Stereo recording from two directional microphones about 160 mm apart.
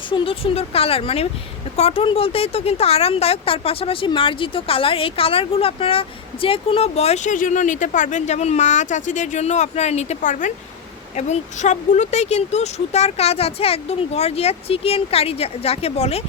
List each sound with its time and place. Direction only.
0.1 s speech: 35° left (ahead or behind)